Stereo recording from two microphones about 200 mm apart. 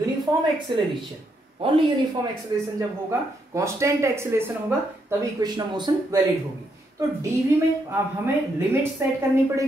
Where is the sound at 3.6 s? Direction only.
15° right (ahead or behind).